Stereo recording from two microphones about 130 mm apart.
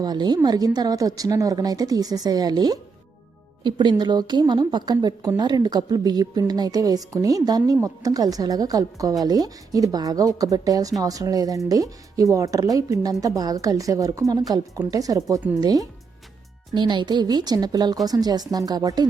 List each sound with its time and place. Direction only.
0.0 s a woman's voice: 30° right (ahead or behind)